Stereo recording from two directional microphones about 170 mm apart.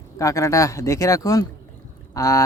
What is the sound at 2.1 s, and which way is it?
Boat, 20° left (ahead or behind).